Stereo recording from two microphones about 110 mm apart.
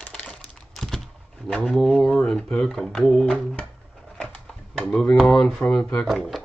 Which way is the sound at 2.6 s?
5° left (ahead or behind).